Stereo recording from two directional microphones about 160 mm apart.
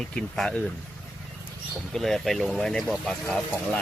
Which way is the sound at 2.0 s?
Centre (ahead or behind).